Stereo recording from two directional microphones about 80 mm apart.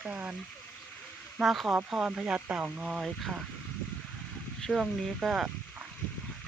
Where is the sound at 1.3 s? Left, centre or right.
Centre.